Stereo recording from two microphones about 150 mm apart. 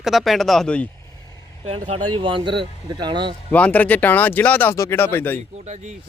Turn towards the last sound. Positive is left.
turn(degrees=15)  # may be behind; listen again after turning